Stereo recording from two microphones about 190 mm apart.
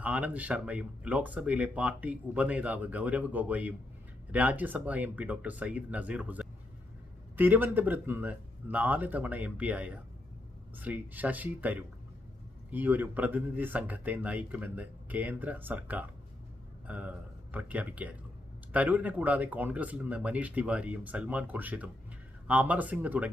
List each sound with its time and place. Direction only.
0.0 s speech: 5° right (ahead or behind)